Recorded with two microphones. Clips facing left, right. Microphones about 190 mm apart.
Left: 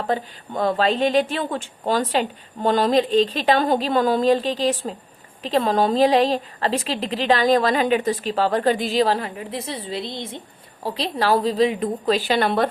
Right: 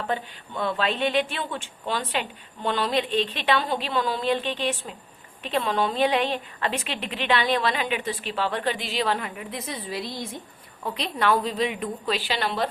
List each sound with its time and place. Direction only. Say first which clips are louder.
0.0 s a woman's voice: left 5 dB; 40° left (ahead or behind)